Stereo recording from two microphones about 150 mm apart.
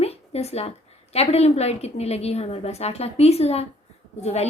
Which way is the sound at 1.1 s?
45° left (ahead or behind).